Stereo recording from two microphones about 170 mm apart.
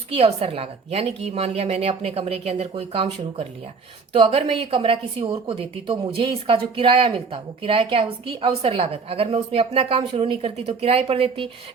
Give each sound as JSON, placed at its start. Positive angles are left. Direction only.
{"t": 0.1, "sound": "a woman's voice", "side_deg": -35}